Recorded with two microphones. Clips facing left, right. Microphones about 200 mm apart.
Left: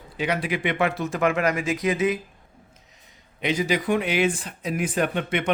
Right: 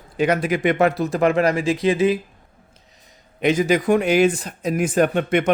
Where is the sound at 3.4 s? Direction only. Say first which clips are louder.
Right 6 dB; 50° right (ahead or behind).